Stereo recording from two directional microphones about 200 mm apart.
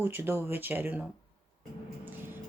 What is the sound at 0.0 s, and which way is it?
Speech, 10° right (ahead or behind).